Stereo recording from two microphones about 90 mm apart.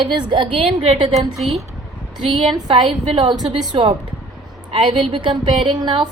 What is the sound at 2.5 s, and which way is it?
A woman's voice, 60° right (ahead or behind).